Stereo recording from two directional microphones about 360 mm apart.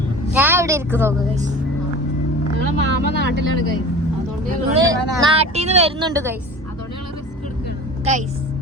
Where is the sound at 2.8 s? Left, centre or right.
Right.